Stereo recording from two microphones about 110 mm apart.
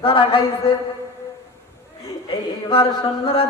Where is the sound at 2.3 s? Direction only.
50° left (ahead or behind).